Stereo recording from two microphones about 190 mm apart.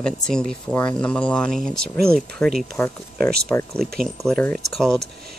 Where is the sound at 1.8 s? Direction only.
55° right (ahead or behind).